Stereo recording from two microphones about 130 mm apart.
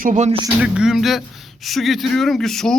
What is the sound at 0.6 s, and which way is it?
Speech, 5° right (ahead or behind).